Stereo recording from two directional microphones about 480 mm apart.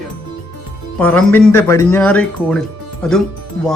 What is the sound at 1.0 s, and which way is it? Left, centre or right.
A man's voice, centre.